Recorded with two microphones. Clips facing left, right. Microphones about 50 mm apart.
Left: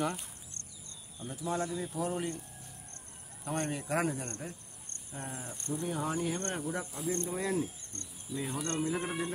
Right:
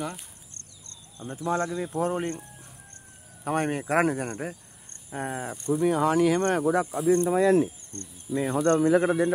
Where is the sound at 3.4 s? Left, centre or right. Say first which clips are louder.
Right 9 dB; right.